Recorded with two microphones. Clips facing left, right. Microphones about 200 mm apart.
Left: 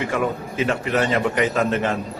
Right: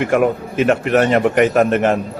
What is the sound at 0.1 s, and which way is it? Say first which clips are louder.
Speech: right 8 dB; 60° right (ahead or behind).